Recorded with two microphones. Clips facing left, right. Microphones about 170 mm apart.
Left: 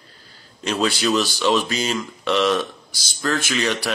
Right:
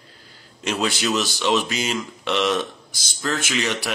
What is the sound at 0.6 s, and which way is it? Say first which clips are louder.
Speech: left 2 dB; 20° right (ahead or behind).